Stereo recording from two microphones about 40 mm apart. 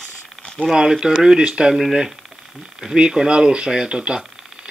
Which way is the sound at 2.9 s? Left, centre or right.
Right.